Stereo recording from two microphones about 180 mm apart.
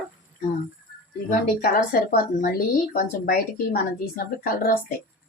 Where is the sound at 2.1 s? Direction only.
55° left (ahead or behind).